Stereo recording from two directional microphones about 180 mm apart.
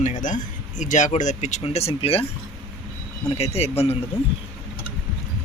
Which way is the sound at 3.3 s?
35° left (ahead or behind).